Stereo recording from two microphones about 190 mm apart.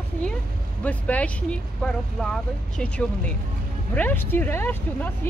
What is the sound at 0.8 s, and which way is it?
Speech, 5° left (ahead or behind).